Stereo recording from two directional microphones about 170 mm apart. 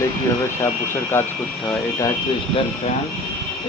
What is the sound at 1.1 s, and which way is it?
Speech, 15° left (ahead or behind).